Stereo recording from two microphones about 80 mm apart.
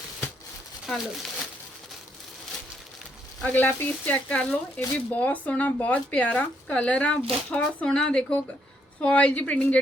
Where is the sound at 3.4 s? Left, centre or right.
Left.